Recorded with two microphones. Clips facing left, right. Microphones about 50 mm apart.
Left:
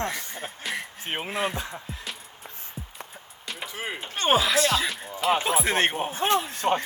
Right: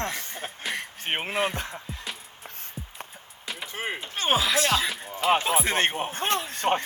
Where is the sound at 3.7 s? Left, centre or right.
Right.